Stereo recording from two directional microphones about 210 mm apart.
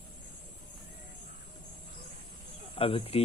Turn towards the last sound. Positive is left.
turn(degrees=25)  # may be behind; listen again after turning